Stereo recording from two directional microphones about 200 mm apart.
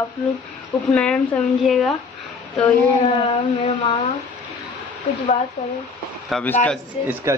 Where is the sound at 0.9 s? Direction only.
5° left (ahead or behind).